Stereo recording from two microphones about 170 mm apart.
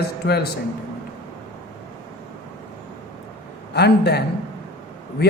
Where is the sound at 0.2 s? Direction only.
75° left (ahead or behind).